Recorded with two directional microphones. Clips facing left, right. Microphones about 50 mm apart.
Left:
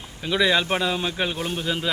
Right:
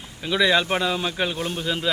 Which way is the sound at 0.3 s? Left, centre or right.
Centre.